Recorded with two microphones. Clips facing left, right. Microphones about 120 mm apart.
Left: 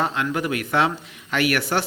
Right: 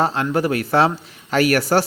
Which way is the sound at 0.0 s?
35° right (ahead or behind).